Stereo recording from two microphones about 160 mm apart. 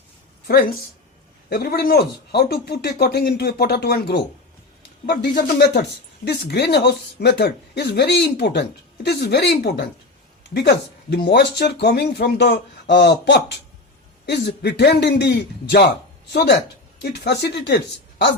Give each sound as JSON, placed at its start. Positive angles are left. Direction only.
{"t": 1.5, "sound": "speech", "side_deg": 70}
{"t": 11.1, "sound": "speech", "side_deg": 90}